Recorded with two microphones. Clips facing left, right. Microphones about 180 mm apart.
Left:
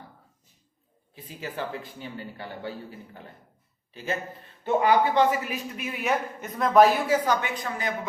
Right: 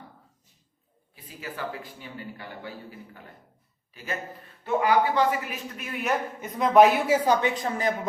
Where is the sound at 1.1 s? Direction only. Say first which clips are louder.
Left 3 dB; 25° left (ahead or behind).